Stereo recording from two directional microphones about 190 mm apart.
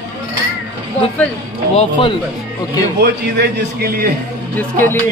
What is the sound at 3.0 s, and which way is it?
A man's voice, 60° right (ahead or behind).